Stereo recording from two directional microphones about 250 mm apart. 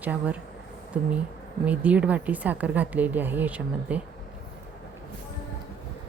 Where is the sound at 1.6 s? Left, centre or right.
Centre.